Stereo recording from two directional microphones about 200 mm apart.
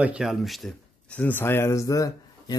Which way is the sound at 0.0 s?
5° right (ahead or behind).